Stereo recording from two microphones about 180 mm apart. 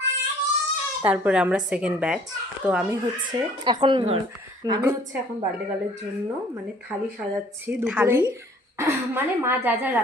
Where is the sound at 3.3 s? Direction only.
25° right (ahead or behind).